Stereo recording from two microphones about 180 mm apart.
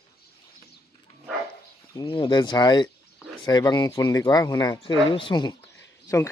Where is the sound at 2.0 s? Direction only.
25° left (ahead or behind).